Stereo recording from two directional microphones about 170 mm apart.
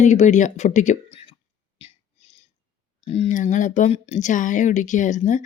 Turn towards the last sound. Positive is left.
turn(degrees=45)  # may be behind; listen again after turning